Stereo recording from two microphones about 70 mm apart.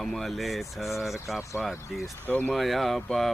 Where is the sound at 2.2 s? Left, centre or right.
Left.